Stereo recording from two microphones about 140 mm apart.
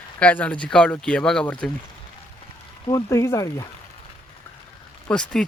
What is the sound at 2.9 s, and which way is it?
Speech, 25° left (ahead or behind).